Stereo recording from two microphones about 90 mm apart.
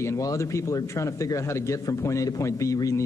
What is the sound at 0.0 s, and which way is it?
Speech, 35° left (ahead or behind).